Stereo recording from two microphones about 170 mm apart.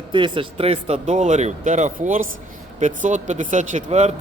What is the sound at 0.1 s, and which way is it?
Speech, 30° right (ahead or behind).